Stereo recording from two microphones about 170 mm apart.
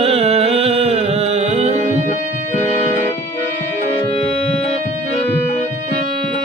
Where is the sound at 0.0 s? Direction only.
35° right (ahead or behind).